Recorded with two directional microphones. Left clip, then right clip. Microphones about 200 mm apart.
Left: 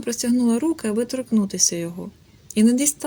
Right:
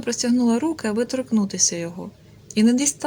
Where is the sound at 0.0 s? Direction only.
25° left (ahead or behind).